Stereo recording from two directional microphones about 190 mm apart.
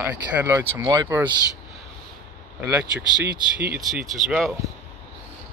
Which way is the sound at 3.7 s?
5° right (ahead or behind).